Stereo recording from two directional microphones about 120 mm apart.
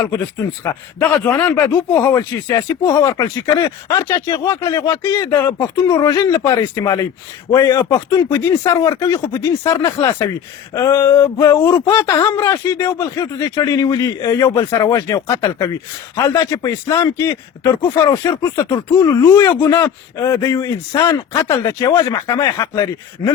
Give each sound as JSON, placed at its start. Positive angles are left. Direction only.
{"t": 0.6, "sound": "speech", "side_deg": 25}